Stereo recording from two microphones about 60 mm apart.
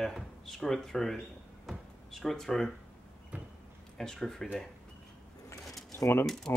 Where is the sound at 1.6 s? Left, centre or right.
Centre.